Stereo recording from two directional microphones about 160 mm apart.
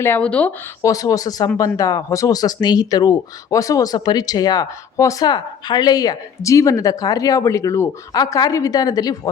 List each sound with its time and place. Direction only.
0.0 s speech: 10° left (ahead or behind)
0.8 s speech: 20° left (ahead or behind)